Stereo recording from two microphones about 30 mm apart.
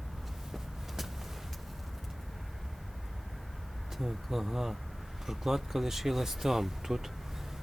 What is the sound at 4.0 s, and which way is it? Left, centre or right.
Vehicle, centre.